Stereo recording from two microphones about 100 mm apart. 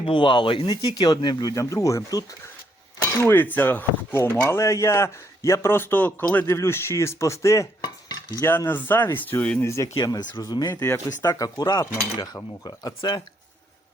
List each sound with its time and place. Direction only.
0.0 s speech: 55° left (ahead or behind); by 2.2 s 35° left (ahead or behind)
3.2 s speech: 20° left (ahead or behind)
9.6 s speech: 30° left (ahead or behind)
10.0 s speech: 40° left (ahead or behind)
10.8 s speech: 25° left (ahead or behind)
11.4 s speech: 45° left (ahead or behind)